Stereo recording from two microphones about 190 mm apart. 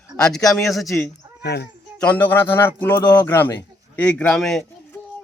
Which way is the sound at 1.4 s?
60° left (ahead or behind).